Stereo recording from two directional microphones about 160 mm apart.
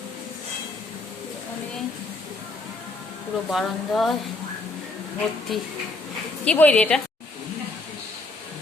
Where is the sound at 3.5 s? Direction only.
Centre (ahead or behind).